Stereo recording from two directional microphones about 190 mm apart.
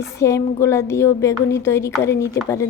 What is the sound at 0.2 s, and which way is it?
Speech, 15° left (ahead or behind).